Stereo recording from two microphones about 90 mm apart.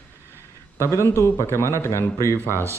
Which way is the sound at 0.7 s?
30° left (ahead or behind).